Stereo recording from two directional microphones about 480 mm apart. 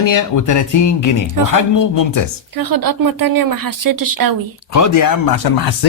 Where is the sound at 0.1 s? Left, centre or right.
Left.